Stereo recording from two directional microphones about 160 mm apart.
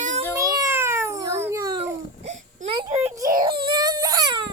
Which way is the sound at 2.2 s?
45° right (ahead or behind).